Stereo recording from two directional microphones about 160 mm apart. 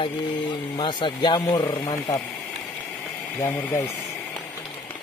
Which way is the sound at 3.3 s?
15° left (ahead or behind).